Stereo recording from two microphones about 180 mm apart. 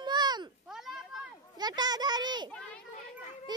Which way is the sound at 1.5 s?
25° right (ahead or behind).